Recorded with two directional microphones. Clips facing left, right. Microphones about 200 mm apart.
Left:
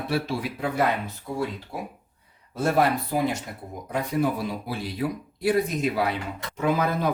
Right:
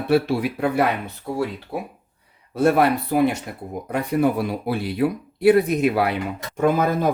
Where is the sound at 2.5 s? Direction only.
60° right (ahead or behind).